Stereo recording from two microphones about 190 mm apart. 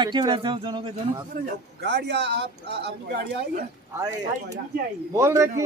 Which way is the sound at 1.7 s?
60° right (ahead or behind).